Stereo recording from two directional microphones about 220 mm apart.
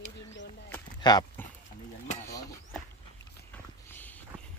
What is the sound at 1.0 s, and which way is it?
Horse, 20° left (ahead or behind).